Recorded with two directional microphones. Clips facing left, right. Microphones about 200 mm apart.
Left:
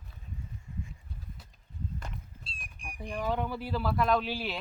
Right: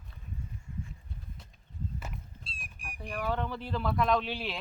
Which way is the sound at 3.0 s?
15° left (ahead or behind).